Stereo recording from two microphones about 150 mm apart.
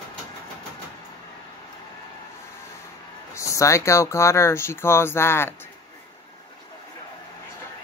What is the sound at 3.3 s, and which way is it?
Speech, 20° left (ahead or behind).